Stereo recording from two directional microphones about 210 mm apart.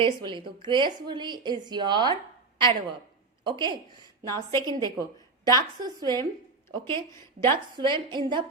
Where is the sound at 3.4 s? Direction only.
20° right (ahead or behind).